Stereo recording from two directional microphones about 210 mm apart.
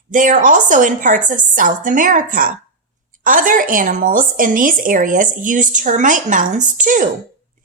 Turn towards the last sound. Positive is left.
turn(degrees=-40)  # may be behind; listen again after turning